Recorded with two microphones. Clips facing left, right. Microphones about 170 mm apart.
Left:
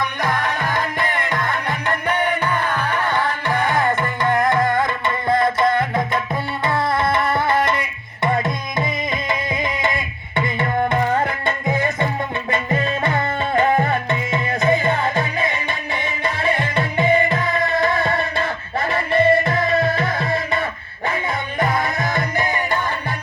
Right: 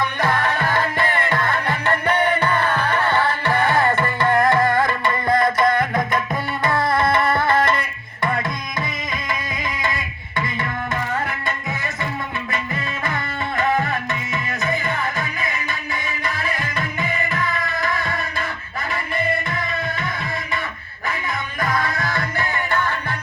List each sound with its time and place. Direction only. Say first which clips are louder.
0.2 s music: right 2 dB; 15° left (ahead or behind)
6.7 s tabla: even; 25° left (ahead or behind)
7.0 s tabla: right 1 dB; centre (ahead or behind)
7.3 s music: even; 20° left (ahead or behind)
13.6 s tabla: left 3 dB; 30° left (ahead or behind)
16.2 s music: left 7 dB; 30° left (ahead or behind)